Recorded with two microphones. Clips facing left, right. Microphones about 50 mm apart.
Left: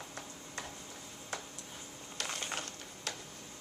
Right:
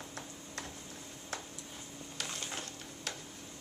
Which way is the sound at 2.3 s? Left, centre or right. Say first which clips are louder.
Left 4 dB; left.